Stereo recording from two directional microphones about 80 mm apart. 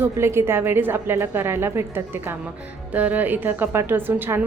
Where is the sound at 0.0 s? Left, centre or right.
Right.